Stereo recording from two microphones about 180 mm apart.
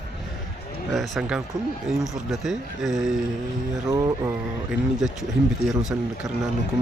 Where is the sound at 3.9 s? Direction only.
20° right (ahead or behind).